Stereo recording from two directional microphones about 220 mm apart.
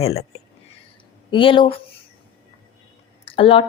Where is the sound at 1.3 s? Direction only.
20° left (ahead or behind).